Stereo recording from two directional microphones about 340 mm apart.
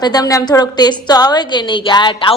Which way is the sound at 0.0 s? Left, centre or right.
Centre.